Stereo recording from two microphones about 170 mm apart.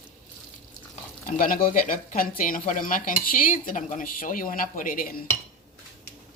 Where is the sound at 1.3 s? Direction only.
55° left (ahead or behind).